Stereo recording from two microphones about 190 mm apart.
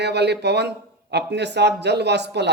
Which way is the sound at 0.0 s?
60° right (ahead or behind).